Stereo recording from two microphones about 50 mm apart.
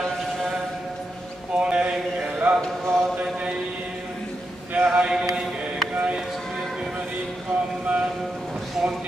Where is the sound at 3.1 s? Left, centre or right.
Right.